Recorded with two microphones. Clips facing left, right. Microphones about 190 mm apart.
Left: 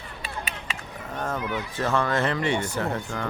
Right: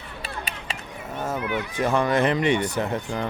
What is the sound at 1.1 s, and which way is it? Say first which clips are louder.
Speech: right 2 dB; 5° right (ahead or behind).